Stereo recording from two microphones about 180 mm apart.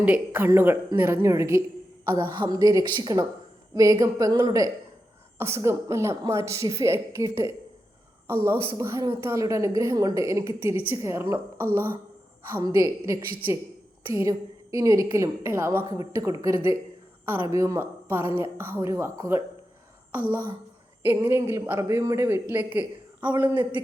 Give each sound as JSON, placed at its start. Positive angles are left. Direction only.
{"t": 0.0, "sound": "a woman's voice", "side_deg": -10}
{"t": 8.8, "sound": "a woman's voice", "side_deg": -15}
{"t": 23.3, "sound": "a woman's voice", "side_deg": -20}